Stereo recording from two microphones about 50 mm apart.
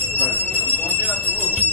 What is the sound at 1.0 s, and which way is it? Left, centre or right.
Jingle bell, left.